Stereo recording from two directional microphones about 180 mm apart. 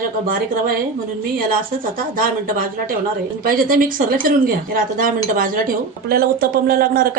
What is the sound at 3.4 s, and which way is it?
Speech, 50° right (ahead or behind).